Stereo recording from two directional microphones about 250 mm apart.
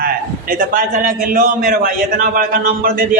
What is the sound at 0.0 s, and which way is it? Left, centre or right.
A man's voice, right.